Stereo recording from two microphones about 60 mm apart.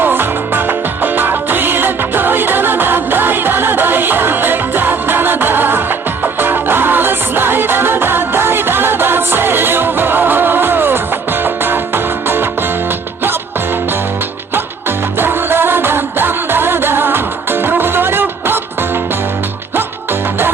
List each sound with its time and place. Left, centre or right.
0.0 s music: right
14.5 s music: right